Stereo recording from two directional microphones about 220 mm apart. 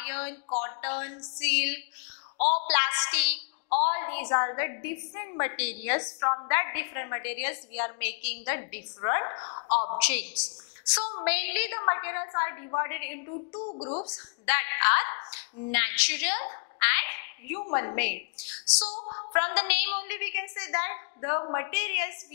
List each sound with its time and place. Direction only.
0.0 s a woman's voice: 10° left (ahead or behind)
2.3 s speech: 35° left (ahead or behind)
2.7 s a woman's voice: 10° left (ahead or behind); by 9.9 s 30° left (ahead or behind)
9.9 s a woman's voice: 10° left (ahead or behind); by 14.2 s 25° left (ahead or behind)
14.4 s a woman's voice: 15° left (ahead or behind)
18.9 s a woman's voice: 30° left (ahead or behind)
19.3 s a woman's voice: 10° left (ahead or behind)